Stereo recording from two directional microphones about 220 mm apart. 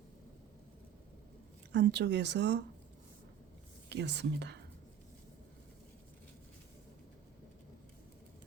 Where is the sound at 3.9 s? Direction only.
50° right (ahead or behind).